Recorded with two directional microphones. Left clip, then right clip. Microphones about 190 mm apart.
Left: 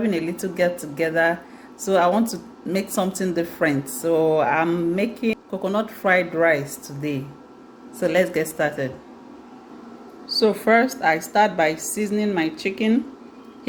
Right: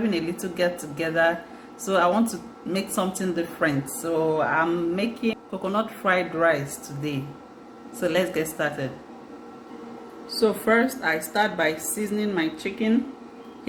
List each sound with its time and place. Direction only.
0.1 s a woman's voice: 30° left (ahead or behind)
10.2 s a woman's voice: 35° left (ahead or behind)